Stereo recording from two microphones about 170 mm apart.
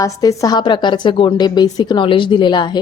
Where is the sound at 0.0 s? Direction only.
20° left (ahead or behind).